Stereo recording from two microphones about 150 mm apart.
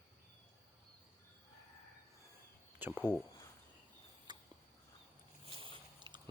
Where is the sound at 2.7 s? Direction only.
15° right (ahead or behind).